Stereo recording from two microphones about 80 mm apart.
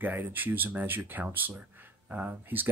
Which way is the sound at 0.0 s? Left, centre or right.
Right.